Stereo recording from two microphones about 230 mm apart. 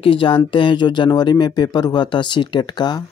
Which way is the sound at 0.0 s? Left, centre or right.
Left.